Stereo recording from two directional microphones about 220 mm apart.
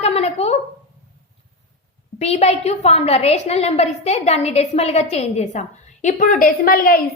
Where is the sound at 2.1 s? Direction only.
30° left (ahead or behind).